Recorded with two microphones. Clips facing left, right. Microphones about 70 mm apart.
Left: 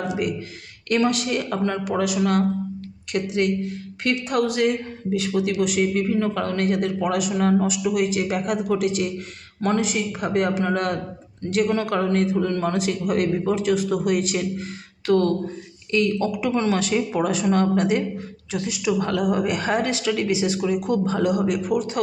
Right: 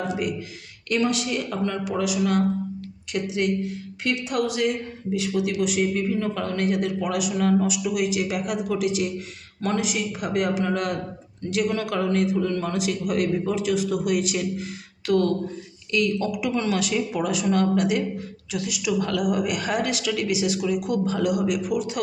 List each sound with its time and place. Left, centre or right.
0.2 s a man's voice: left